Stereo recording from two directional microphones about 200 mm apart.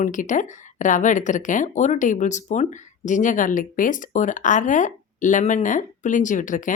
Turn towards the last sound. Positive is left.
turn(degrees=40)  # may be behind; listen again after turning